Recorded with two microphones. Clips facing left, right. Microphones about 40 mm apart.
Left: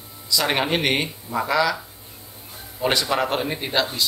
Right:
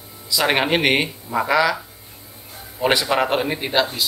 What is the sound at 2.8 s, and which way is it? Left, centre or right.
A man's voice, centre.